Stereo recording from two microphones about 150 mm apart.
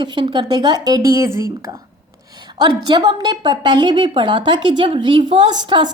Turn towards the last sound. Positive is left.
turn(degrees=-30)  # may be behind; listen again after turning